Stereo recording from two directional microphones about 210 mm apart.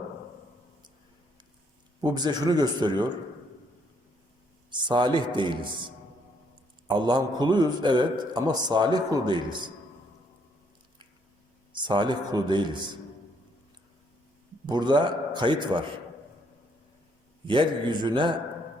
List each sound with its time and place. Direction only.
2.0 s a man's voice: 20° right (ahead or behind)
4.7 s a man's voice: 20° right (ahead or behind)
6.8 s a man's voice: 20° right (ahead or behind)
11.7 s a man's voice: 20° right (ahead or behind)
14.7 s a man's voice: 20° right (ahead or behind)
17.4 s a man's voice: 25° right (ahead or behind)